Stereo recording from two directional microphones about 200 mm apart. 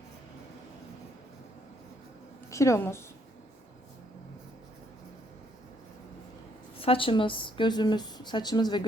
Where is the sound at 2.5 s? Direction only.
15° left (ahead or behind).